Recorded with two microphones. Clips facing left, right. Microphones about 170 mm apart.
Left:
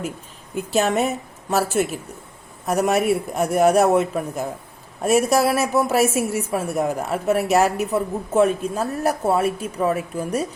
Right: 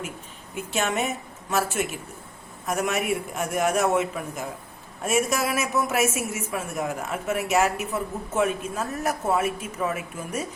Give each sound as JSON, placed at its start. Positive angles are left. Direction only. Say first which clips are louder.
{"t": 0.5, "sound": "a woman's voice", "louder": "left 7 dB", "side_deg": 35}